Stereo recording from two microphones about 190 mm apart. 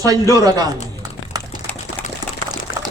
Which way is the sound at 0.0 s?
20° right (ahead or behind).